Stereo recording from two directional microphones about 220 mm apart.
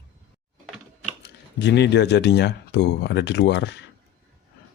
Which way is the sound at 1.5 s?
50° left (ahead or behind).